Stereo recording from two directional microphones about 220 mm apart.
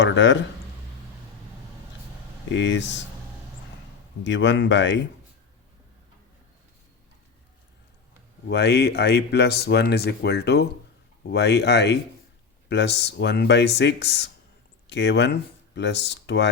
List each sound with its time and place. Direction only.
0.0 s speech: 55° left (ahead or behind)
2.5 s speech: 55° left (ahead or behind)
4.2 s speech: 55° left (ahead or behind)
8.4 s speech: 50° left (ahead or behind)